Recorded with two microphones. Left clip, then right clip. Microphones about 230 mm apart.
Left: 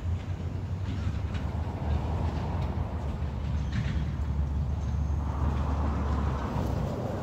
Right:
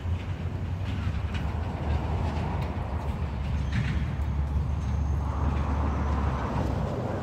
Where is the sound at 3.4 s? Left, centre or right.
Right.